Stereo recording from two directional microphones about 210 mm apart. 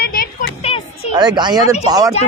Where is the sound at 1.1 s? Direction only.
20° right (ahead or behind).